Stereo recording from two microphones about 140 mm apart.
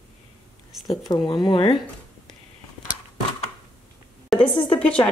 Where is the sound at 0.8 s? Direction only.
30° left (ahead or behind).